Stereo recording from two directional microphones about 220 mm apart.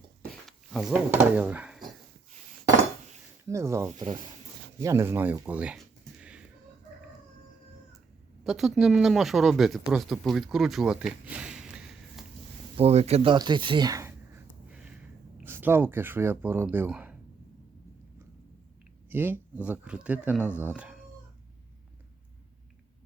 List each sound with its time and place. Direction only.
0.4 s speech: centre (ahead or behind)
3.5 s speech: 15° right (ahead or behind)
8.4 s speech: centre (ahead or behind)
12.7 s speech: 30° right (ahead or behind)
15.4 s speech: 10° right (ahead or behind)
19.1 s speech: 10° right (ahead or behind)